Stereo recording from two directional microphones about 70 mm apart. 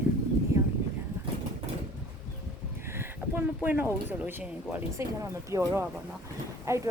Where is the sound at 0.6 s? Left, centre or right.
Right.